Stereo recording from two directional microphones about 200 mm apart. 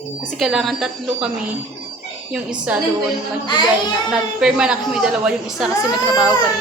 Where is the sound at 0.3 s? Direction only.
Centre (ahead or behind).